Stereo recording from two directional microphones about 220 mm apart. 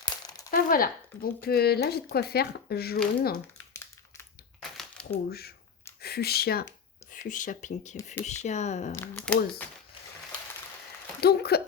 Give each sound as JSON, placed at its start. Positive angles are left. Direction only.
{"t": 0.5, "sound": "speech", "side_deg": 40}
{"t": 3.7, "sound": "crumpling", "side_deg": 15}
{"t": 5.1, "sound": "speech", "side_deg": 45}
{"t": 9.0, "sound": "speech", "side_deg": 5}
{"t": 11.2, "sound": "speech", "side_deg": 45}